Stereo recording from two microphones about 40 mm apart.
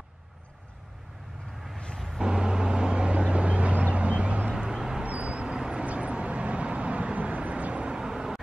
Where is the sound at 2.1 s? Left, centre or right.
Centre; by 4.5 s right.